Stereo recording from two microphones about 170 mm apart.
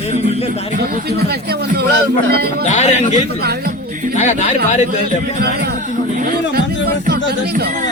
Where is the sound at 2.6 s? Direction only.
45° left (ahead or behind).